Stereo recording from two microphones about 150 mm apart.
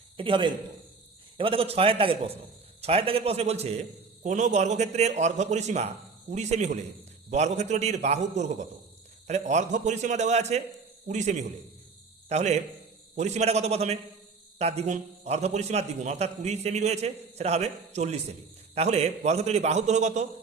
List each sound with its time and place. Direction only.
0.2 s a man's voice: 35° right (ahead or behind)
4.2 s a man's voice: 55° right (ahead or behind)